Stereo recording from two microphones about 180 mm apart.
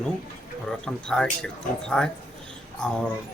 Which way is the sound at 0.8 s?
5° left (ahead or behind).